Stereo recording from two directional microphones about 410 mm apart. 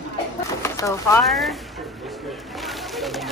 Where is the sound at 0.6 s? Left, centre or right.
Centre.